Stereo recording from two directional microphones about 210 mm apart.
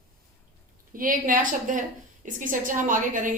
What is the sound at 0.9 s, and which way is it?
A woman's voice, 40° right (ahead or behind).